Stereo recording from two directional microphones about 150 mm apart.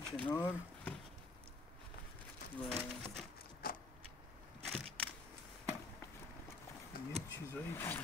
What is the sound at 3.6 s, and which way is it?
Vehicle, 75° left (ahead or behind).